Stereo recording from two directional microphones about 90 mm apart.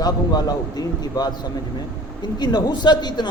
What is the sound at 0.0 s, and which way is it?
A man's voice, 45° left (ahead or behind).